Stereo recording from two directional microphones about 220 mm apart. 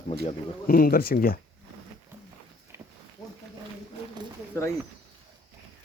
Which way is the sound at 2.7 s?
10° right (ahead or behind).